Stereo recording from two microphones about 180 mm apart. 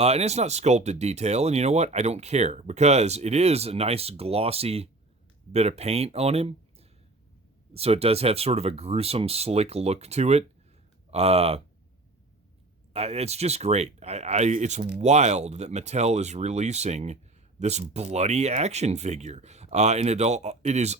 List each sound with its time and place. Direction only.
0.0 s speech: 35° right (ahead or behind)
12.9 s speech: 35° right (ahead or behind)